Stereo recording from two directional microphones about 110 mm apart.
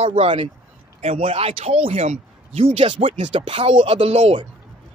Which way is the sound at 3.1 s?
85° right.